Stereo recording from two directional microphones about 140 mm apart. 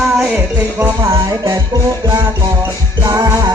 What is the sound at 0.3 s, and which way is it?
Music, 15° right (ahead or behind).